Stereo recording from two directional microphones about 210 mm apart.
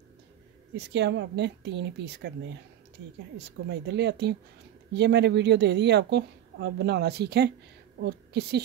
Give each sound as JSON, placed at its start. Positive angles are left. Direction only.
{"t": 0.7, "sound": "a woman's voice", "side_deg": -55}
{"t": 3.3, "sound": "a woman's voice", "side_deg": -55}